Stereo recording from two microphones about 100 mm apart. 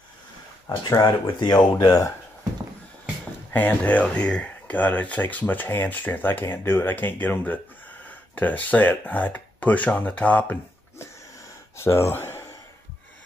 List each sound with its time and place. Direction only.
0.7 s speech: 45° left (ahead or behind)
3.5 s speech: 15° left (ahead or behind)